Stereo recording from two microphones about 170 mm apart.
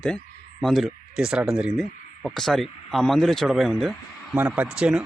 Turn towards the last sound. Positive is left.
turn(degrees=-5)  # may be behind; listen again after turning